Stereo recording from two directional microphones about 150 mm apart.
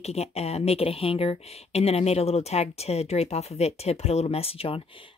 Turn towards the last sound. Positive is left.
turn(degrees=40)  # may be behind; listen again after turning